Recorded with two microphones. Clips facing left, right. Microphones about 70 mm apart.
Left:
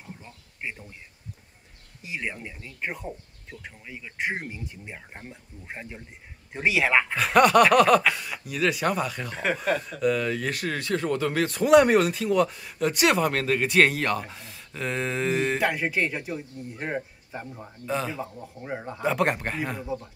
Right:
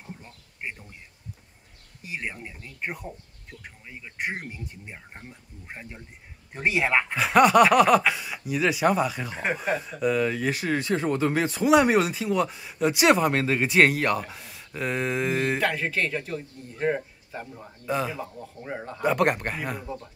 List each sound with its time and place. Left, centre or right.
7.2 s speech: centre
11.5 s speech: centre
15.6 s speech: centre